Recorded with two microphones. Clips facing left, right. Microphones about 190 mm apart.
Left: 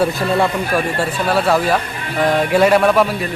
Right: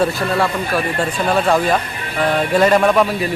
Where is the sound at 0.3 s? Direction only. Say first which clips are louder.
Left 2 dB; 20° left (ahead or behind).